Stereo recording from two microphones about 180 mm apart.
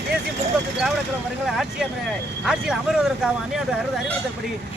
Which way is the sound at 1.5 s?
Centre (ahead or behind).